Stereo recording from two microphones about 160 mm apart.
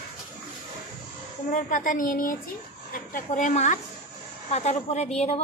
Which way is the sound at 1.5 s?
55° left (ahead or behind).